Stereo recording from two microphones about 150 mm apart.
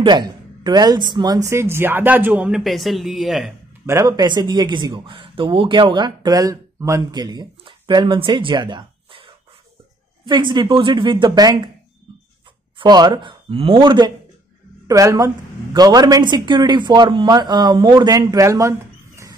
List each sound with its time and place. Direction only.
0.0 s a woman's voice: 30° right (ahead or behind); by 3.5 s centre (ahead or behind)
3.8 s a woman's voice: 20° right (ahead or behind)
12.7 s a woman's voice: 30° right (ahead or behind)